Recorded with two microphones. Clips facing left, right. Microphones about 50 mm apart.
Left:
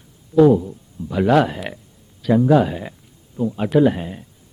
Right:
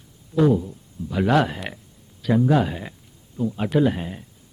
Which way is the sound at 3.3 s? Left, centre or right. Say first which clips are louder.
Left 3 dB; centre.